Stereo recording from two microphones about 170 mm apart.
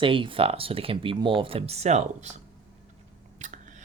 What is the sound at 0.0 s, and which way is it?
Speech, 30° right (ahead or behind).